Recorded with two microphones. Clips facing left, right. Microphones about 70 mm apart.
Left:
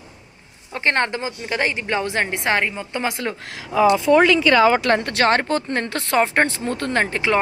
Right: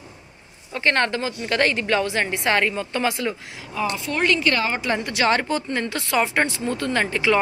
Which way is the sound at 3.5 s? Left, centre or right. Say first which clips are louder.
Left 10 dB; left.